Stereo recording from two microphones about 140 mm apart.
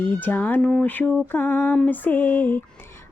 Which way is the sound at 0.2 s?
10° left (ahead or behind).